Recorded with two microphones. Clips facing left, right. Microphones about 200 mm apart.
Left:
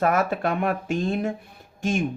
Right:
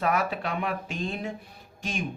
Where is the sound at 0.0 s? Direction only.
45° left (ahead or behind).